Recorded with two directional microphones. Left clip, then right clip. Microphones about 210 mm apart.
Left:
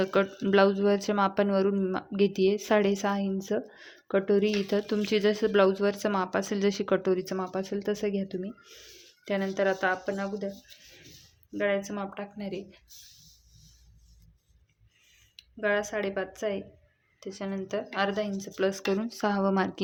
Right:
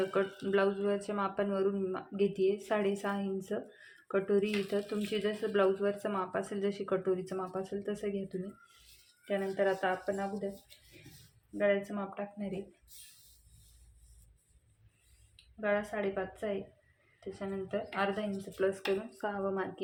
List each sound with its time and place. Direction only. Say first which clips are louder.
0.0 s speech: left 6 dB; 50° left (ahead or behind)
9.2 s speech: left 4 dB; 55° left (ahead or behind)
11.5 s speech: left 2 dB; 55° left (ahead or behind)
15.4 s speech: left 5 dB; 55° left (ahead or behind); by 19.8 s 40° left (ahead or behind)